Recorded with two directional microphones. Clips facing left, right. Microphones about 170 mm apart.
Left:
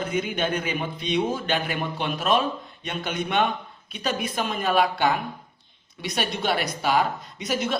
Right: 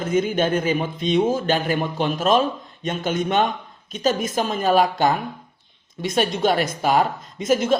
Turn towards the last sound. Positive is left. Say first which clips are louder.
# right 7 dB
turn(degrees=-45)  # may be behind; listen again after turning